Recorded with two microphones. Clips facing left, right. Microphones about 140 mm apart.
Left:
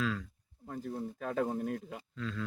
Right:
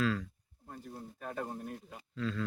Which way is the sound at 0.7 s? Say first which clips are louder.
Left 8 dB; 80° left.